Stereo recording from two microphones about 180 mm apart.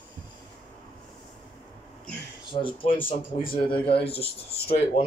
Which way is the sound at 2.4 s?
25° left (ahead or behind).